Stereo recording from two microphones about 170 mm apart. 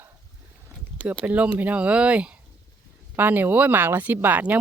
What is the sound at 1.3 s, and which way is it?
Speech, 10° right (ahead or behind).